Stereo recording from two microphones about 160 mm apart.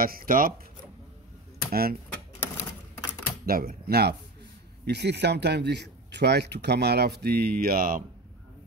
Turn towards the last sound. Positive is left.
turn(degrees=-65)  # may be behind; listen again after turning